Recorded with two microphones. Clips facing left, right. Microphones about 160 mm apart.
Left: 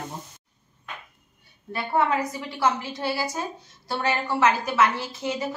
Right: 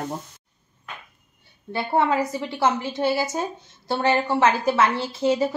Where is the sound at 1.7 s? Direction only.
30° right (ahead or behind).